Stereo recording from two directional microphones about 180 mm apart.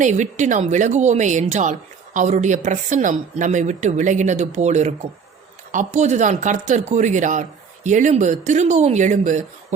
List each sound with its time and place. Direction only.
0.0 s speech: 40° right (ahead or behind)